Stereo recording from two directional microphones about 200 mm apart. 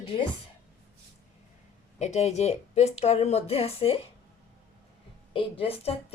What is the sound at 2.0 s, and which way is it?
Speech, 35° left (ahead or behind).